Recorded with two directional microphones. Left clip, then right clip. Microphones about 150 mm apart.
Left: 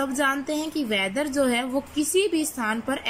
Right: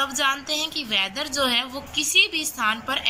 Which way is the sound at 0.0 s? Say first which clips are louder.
Right 1 dB; 50° left (ahead or behind).